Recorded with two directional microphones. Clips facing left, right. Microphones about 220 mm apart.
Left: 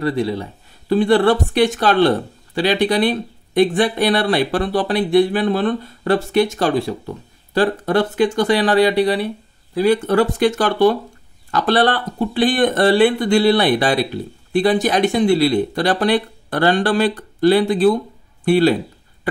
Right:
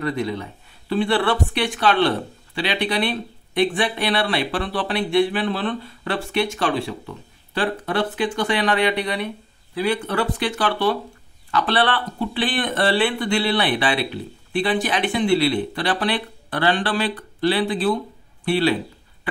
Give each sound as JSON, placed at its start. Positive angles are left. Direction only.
{"t": 0.0, "sound": "speech", "side_deg": 30}